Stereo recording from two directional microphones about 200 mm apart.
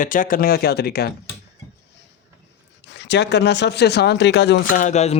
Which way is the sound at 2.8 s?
60° left (ahead or behind).